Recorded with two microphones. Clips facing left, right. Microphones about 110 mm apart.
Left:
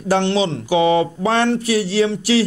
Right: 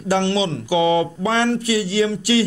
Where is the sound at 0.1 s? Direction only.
30° left (ahead or behind).